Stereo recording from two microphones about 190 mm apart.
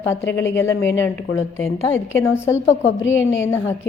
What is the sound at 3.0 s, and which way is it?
Speech, 80° left.